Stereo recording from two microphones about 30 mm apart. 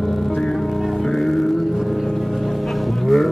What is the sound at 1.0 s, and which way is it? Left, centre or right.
Music, centre.